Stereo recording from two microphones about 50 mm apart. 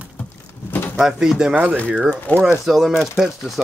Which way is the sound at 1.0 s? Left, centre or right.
Centre.